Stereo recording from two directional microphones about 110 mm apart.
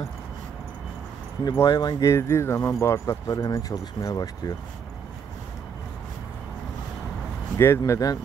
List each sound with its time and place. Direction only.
1.6 s speech: 40° left (ahead or behind)
2.0 s speech: 25° left (ahead or behind)
7.5 s speech: 25° left (ahead or behind)